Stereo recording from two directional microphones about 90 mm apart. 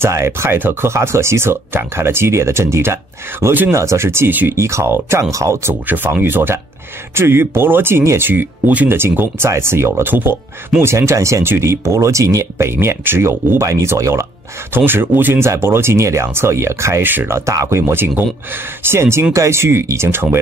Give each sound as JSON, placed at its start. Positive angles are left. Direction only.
{"t": 0.0, "sound": "speech", "side_deg": -30}
{"t": 14.9, "sound": "speech", "side_deg": -20}
{"t": 17.5, "sound": "speech", "side_deg": -30}